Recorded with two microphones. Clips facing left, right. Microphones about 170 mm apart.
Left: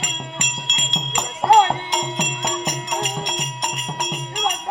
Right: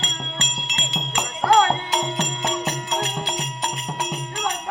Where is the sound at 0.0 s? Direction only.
15° left (ahead or behind).